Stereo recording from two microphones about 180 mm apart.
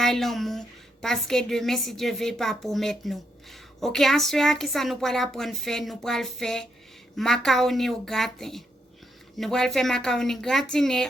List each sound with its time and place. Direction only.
0.0 s a woman's voice: centre (ahead or behind)